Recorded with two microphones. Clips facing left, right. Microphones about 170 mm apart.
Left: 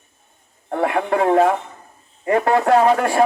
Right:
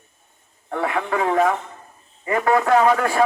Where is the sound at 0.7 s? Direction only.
40° left (ahead or behind).